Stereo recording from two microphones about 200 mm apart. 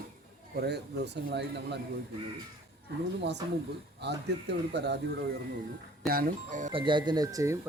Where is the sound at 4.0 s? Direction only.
60° right (ahead or behind).